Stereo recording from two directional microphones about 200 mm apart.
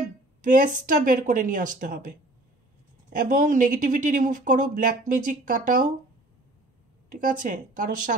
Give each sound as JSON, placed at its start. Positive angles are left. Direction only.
{"t": 0.4, "sound": "speech", "side_deg": -40}
{"t": 7.1, "sound": "speech", "side_deg": -40}